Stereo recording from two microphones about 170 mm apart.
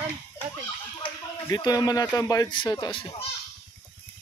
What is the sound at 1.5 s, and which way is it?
Speech, 20° left (ahead or behind).